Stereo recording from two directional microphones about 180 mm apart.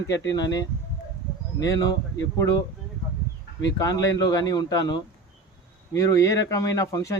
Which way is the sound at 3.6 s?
20° left (ahead or behind).